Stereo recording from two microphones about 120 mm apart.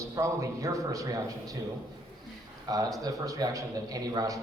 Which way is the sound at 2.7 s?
35° right (ahead or behind).